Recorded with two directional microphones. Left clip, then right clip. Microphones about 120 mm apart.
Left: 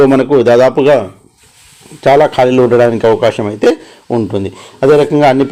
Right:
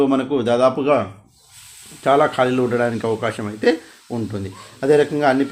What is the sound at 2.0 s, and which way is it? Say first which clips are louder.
A man's voice: left 8 dB; 45° left (ahead or behind).